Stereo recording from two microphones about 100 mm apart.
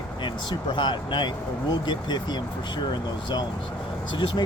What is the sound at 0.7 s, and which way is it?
Speech, 50° left (ahead or behind).